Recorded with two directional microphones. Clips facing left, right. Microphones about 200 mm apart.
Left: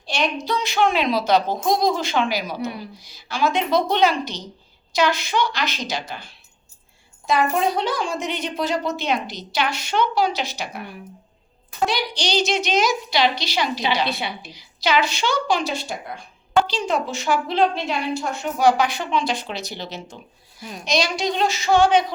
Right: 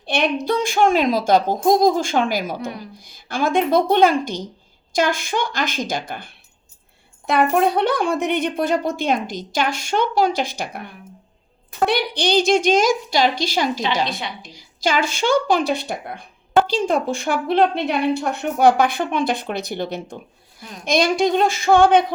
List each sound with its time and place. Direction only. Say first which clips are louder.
0.0 s a woman's voice: right 4 dB; 55° right (ahead or behind)
11.9 s a woman's voice: right 8 dB; 55° right (ahead or behind)
14.1 s a woman's voice: left 1 dB; 5° left (ahead or behind)
14.5 s a woman's voice: even; 45° right (ahead or behind)